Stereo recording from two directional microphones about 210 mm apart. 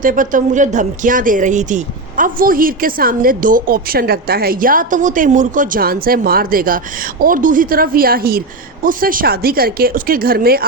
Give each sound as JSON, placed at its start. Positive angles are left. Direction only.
{"t": 0.0, "sound": "speech", "side_deg": -40}